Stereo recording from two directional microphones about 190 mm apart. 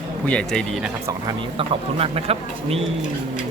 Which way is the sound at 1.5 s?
30° right (ahead or behind).